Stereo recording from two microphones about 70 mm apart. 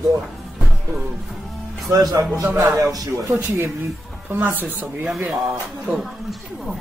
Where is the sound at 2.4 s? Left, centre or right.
Right.